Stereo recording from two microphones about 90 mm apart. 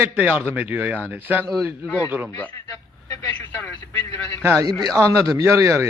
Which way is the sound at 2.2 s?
25° left (ahead or behind).